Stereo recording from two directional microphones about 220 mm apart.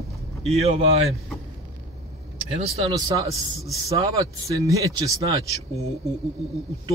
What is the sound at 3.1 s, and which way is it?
Speech, 15° right (ahead or behind).